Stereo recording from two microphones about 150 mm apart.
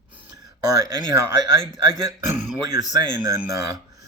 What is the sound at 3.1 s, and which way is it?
Speech, 20° right (ahead or behind).